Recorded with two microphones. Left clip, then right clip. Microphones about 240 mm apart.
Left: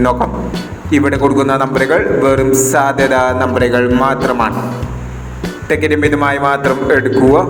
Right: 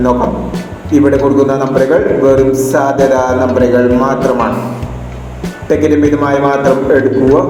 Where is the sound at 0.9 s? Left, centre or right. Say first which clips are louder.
Right 3 dB; left.